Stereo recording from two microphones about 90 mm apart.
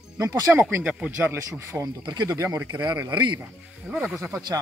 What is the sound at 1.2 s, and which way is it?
Speech, 25° right (ahead or behind).